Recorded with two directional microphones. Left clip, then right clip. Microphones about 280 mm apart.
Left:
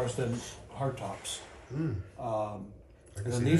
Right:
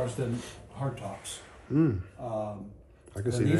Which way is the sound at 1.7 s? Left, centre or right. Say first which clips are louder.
Right 11 dB; right.